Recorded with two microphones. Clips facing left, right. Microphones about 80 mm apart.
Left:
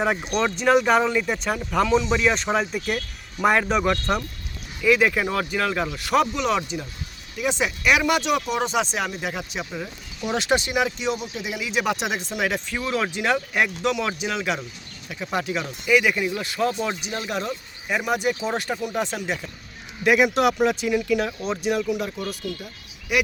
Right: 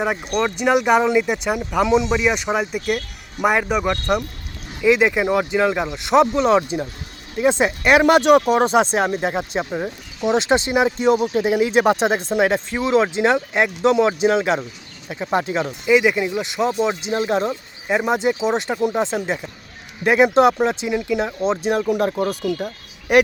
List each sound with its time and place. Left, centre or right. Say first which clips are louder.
0.0 s speech: right 2 dB; centre
4.8 s speech: right 3 dB; right
6.3 s speech: right 7 dB; right